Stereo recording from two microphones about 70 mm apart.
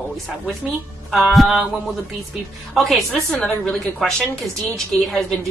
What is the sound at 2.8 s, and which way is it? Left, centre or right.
A woman's voice, centre.